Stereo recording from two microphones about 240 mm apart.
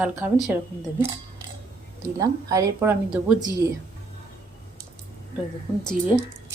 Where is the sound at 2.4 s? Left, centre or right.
Centre.